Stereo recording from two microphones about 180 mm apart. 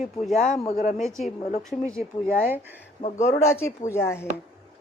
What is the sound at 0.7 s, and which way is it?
Speech, 45° left (ahead or behind).